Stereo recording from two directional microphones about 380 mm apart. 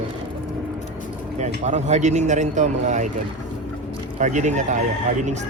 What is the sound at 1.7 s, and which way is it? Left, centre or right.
A man's voice, centre.